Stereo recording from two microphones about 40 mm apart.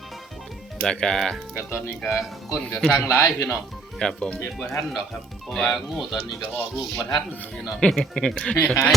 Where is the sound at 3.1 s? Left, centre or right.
Left.